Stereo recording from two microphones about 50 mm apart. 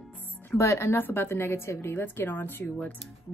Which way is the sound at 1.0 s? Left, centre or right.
Left.